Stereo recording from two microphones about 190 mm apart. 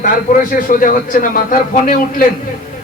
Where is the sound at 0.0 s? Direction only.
45° left (ahead or behind).